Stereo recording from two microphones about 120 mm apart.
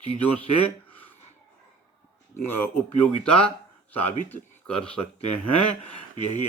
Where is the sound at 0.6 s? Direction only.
15° left (ahead or behind).